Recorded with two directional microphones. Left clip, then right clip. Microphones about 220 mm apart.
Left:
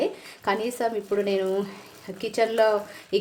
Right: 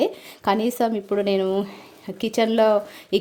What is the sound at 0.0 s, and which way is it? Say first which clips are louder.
A woman's voice: right 4 dB; 35° right (ahead or behind).